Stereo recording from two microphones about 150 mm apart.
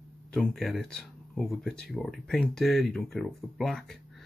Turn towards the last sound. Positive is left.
turn(degrees=5)  # may be behind; listen again after turning